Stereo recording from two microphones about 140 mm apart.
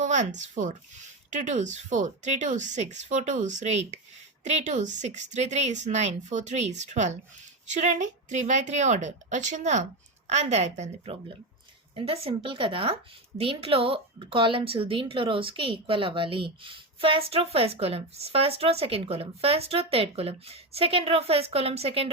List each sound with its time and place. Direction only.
0.0 s speech: 60° right (ahead or behind)